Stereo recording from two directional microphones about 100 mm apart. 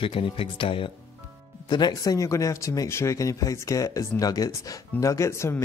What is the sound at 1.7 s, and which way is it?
Speech, 45° left (ahead or behind).